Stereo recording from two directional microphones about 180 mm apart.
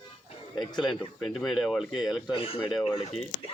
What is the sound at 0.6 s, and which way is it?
Speech, 25° left (ahead or behind).